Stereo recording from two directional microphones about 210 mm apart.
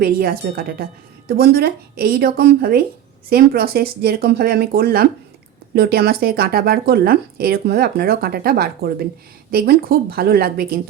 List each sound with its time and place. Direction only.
0.0 s speech: 45° right (ahead or behind)